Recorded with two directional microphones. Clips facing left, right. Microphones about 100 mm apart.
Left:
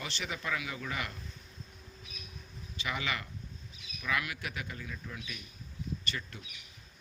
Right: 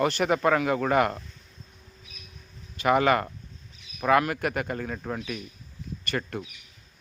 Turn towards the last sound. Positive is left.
turn(degrees=-55)  # may be behind; listen again after turning